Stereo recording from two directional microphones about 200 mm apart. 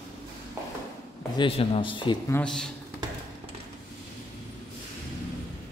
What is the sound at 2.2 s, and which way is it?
Speech, 5° left (ahead or behind).